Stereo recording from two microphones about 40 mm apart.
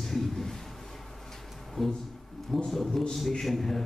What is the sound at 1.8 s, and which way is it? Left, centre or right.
A man's voice, centre.